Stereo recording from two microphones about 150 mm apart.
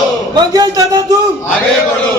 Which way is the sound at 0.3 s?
25° right (ahead or behind).